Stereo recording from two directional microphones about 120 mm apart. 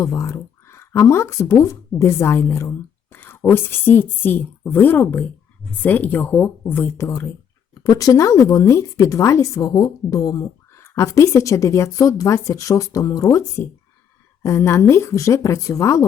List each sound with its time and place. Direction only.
0.0 s a woman's voice: 25° left (ahead or behind)